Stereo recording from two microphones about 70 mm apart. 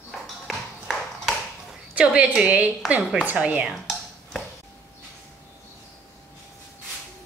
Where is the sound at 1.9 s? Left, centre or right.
Centre.